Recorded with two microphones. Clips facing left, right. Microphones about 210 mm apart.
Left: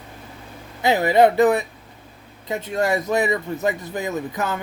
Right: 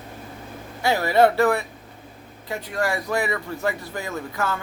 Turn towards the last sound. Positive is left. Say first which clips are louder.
# left 2 dB
turn(degrees=20)  # may be behind; listen again after turning